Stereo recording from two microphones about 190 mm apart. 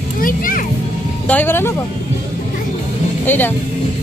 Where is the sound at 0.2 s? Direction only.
45° left (ahead or behind).